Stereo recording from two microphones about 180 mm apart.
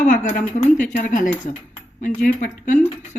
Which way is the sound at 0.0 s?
45° left (ahead or behind).